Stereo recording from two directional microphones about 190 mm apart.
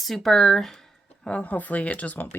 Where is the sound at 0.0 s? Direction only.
Centre (ahead or behind).